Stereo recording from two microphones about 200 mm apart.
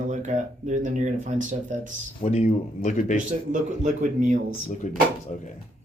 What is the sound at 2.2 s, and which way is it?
Speech, 35° left (ahead or behind).